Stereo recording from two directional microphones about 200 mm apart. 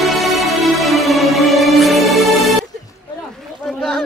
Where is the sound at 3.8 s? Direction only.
Centre (ahead or behind).